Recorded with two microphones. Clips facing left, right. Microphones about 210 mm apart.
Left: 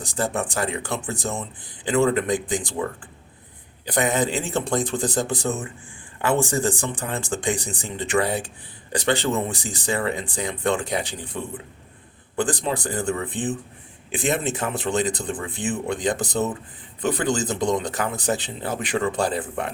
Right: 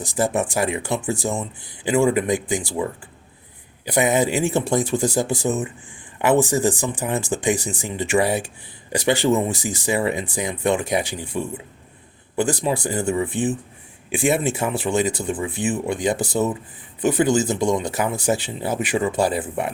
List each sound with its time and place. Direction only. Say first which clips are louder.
0.6 s speech: right 4 dB; 10° right (ahead or behind)
3.8 s speech: right 3 dB; 10° right (ahead or behind)